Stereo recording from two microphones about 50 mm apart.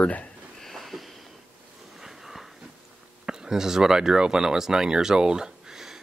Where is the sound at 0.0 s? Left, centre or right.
Left.